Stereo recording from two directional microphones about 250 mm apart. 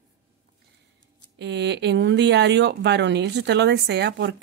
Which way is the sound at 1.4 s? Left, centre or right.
Right.